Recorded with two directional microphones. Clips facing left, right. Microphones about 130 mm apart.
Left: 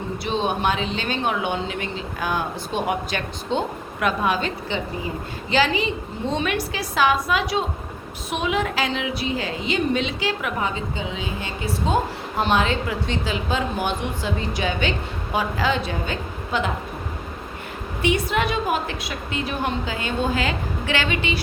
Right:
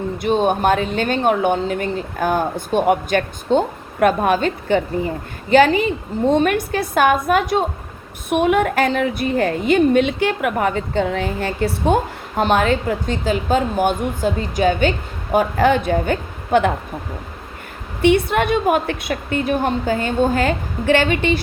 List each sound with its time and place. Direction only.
0.2 s speech: 50° right (ahead or behind)
12.4 s speech: 45° right (ahead or behind)
18.0 s speech: 55° right (ahead or behind)